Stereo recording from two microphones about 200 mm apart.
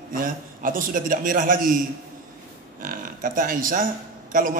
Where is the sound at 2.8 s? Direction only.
45° right (ahead or behind).